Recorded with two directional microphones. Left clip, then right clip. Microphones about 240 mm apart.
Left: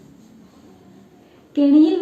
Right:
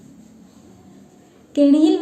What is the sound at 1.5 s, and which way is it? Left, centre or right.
Speech, right.